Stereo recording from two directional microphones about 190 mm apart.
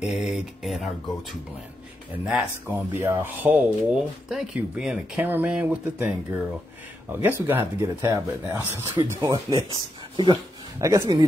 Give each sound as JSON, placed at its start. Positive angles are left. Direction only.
{"t": 0.0, "sound": "speech", "side_deg": -5}
{"t": 2.2, "sound": "speech", "side_deg": -5}
{"t": 7.2, "sound": "speech", "side_deg": -10}